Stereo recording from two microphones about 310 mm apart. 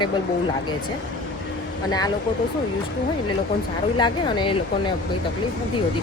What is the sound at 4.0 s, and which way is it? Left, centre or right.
Speech, centre.